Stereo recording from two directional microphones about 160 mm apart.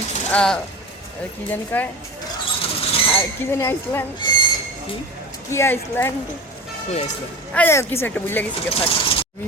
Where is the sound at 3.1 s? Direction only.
15° left (ahead or behind).